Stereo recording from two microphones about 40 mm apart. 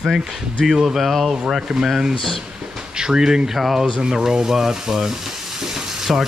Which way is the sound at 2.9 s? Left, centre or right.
Centre.